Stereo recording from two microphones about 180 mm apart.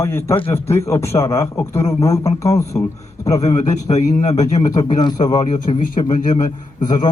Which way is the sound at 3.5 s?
40° left (ahead or behind).